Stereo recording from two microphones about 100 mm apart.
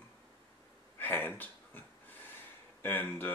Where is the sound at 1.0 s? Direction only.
20° left (ahead or behind).